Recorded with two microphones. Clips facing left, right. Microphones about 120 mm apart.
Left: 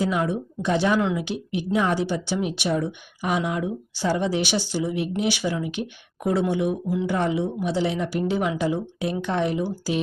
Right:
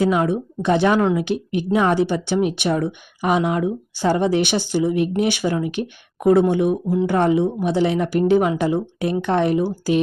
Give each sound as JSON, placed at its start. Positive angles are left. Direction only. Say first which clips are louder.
{"t": 0.0, "sound": "a woman's voice", "louder": "right 5 dB", "side_deg": -60}
{"t": 7.1, "sound": "a woman's voice", "louder": "right 7 dB", "side_deg": -55}